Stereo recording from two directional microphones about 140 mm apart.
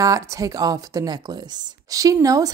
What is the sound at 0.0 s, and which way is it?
A woman's voice, 25° right (ahead or behind).